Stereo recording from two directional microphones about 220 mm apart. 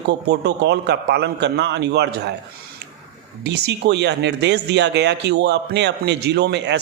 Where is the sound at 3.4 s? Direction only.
50° right (ahead or behind).